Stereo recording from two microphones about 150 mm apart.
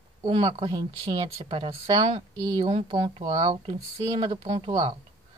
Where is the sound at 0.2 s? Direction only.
30° right (ahead or behind).